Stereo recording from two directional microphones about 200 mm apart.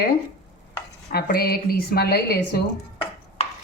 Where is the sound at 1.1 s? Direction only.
50° left (ahead or behind).